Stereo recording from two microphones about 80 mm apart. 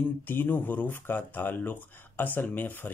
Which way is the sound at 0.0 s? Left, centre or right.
Left.